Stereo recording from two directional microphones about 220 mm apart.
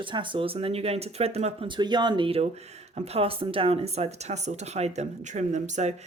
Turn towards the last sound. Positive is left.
turn(degrees=-35)  # may be behind; listen again after turning